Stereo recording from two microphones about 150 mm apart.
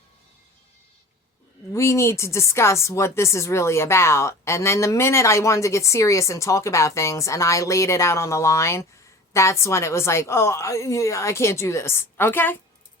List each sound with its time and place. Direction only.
1.7 s speech: 20° left (ahead or behind)